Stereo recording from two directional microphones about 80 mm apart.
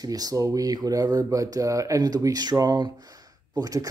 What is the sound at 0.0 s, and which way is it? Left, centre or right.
Speech, right.